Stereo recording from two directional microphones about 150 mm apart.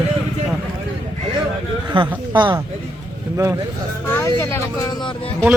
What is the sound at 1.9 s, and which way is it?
Speech, 35° right (ahead or behind).